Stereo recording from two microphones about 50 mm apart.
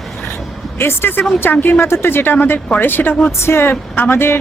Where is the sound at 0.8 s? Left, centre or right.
Left.